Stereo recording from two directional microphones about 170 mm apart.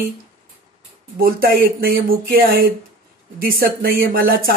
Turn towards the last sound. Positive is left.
turn(degrees=-60)  # may be behind; listen again after turning